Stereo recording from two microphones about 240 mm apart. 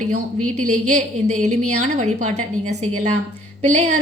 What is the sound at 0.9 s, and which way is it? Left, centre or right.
A woman's voice, right.